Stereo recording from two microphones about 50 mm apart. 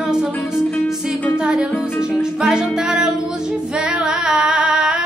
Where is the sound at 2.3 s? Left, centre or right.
Centre.